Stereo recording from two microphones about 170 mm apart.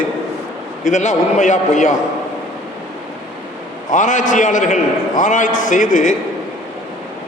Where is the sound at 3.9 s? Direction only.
45° left (ahead or behind).